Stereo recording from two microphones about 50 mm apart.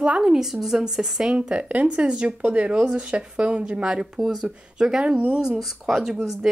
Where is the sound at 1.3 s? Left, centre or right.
Right.